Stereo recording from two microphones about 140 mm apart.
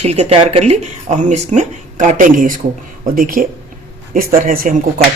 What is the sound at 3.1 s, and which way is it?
A man's voice, 85° right.